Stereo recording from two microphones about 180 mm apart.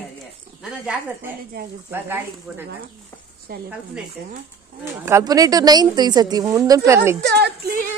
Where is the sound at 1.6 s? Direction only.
60° right (ahead or behind).